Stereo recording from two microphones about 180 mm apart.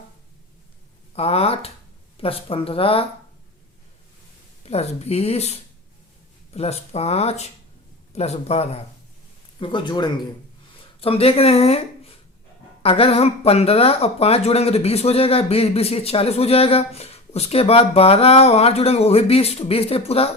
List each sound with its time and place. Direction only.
1.1 s speech: 35° left (ahead or behind)
4.6 s a woman's voice: 35° left (ahead or behind)